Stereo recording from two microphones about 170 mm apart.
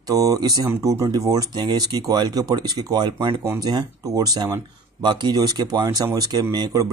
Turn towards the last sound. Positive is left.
turn(degrees=-25)  # may be behind; listen again after turning